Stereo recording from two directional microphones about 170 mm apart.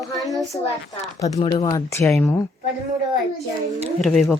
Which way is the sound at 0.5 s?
25° left (ahead or behind).